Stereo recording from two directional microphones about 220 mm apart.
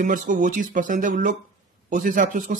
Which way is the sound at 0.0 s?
35° right (ahead or behind).